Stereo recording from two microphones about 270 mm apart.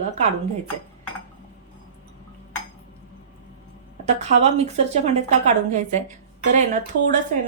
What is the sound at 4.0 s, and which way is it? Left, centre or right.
A woman's voice, right.